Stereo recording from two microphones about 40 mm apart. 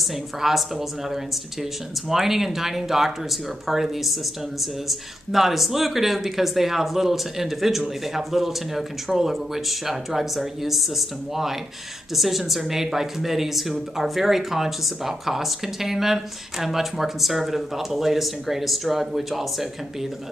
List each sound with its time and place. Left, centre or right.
0.0 s speech: centre